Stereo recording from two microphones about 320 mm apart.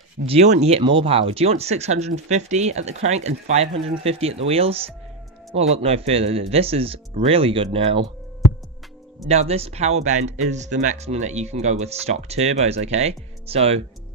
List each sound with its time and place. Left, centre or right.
0.3 s speech: right
9.3 s speech: centre